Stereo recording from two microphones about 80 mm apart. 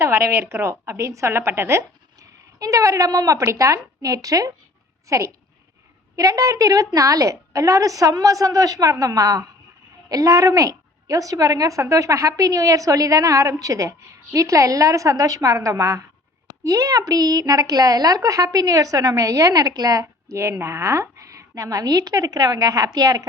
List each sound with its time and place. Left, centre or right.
0.0 s a woman's voice: right